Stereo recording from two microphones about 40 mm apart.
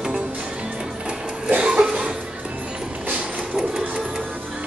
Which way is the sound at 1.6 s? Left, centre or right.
Right.